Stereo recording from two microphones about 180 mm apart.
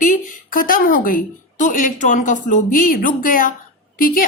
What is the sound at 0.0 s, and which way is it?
Speech, 50° left (ahead or behind).